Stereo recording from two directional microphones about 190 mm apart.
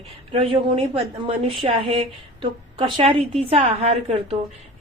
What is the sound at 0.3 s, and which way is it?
A woman's voice, 30° right (ahead or behind).